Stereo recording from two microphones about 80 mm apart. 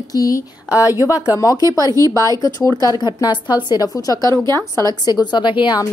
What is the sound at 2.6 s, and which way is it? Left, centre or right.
A woman's voice, left.